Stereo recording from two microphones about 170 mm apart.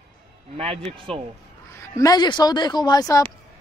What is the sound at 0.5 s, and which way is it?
Speech, 35° right (ahead or behind).